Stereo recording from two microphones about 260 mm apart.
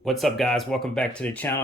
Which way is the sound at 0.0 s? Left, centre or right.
Centre.